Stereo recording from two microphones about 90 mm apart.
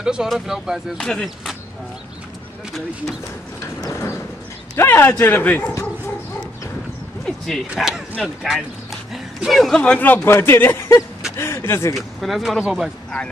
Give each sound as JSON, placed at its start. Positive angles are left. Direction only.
{"t": 0.0, "sound": "speech", "side_deg": -10}
{"t": 0.9, "sound": "speech", "side_deg": 10}
{"t": 4.7, "sound": "speech", "side_deg": 25}
{"t": 7.2, "sound": "speech", "side_deg": 5}
{"t": 7.7, "sound": "speech", "side_deg": -5}
{"t": 9.8, "sound": "speech", "side_deg": 15}
{"t": 11.9, "sound": "speech", "side_deg": 0}